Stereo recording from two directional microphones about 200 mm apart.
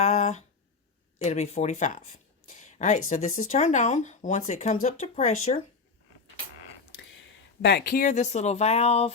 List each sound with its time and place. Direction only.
0.0 s a sound: 35° left (ahead or behind)
1.2 s speech: 35° left (ahead or behind)
7.6 s speech: 50° left (ahead or behind); by 9.1 s 30° left (ahead or behind)